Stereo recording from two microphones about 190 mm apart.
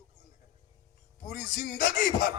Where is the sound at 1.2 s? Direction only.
45° left (ahead or behind).